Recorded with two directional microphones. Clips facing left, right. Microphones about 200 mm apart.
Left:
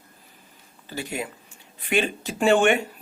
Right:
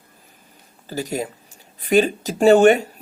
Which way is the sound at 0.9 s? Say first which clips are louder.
Right 6 dB; 40° right (ahead or behind).